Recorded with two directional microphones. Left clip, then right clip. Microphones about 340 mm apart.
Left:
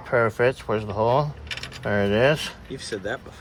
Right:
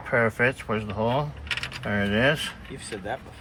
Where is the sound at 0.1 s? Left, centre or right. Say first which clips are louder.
Left 2 dB; left.